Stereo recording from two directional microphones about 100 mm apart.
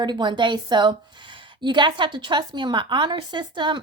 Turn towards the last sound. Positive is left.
turn(degrees=-50)  # may be behind; listen again after turning